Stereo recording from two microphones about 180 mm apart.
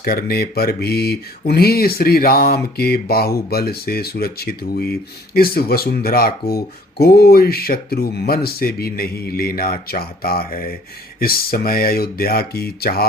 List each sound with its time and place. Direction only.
0.0 s speech: 55° left (ahead or behind)